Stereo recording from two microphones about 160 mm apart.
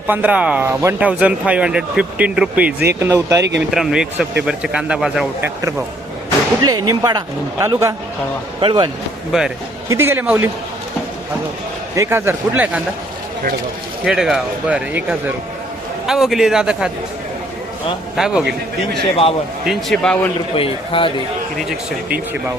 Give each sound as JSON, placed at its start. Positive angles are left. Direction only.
{"t": 0.1, "sound": "speech", "side_deg": -10}
{"t": 0.9, "sound": "speech", "side_deg": -5}
{"t": 3.0, "sound": "speech", "side_deg": -20}
{"t": 3.7, "sound": "speech", "side_deg": 0}
{"t": 6.6, "sound": "speech", "side_deg": -25}
{"t": 8.6, "sound": "speech", "side_deg": -30}
{"t": 9.3, "sound": "speech", "side_deg": -5}
{"t": 9.9, "sound": "speech", "side_deg": -15}
{"t": 11.9, "sound": "speech", "side_deg": -15}
{"t": 14.0, "sound": "speech", "side_deg": 0}
{"t": 16.0, "sound": "speech", "side_deg": 0}
{"t": 18.2, "sound": "speech", "side_deg": -5}
{"t": 19.6, "sound": "speech", "side_deg": 0}
{"t": 20.6, "sound": "speech", "side_deg": 35}